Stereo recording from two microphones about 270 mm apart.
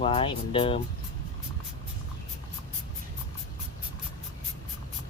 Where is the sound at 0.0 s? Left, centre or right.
Left.